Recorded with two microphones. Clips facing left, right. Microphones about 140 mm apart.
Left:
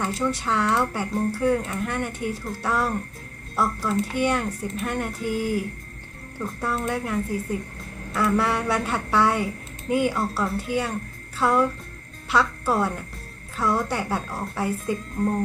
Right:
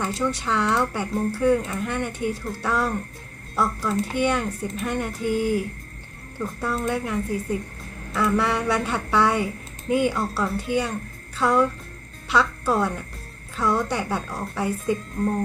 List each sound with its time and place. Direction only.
0.0 s speech: 5° left (ahead or behind)
6.6 s speech: 5° left (ahead or behind)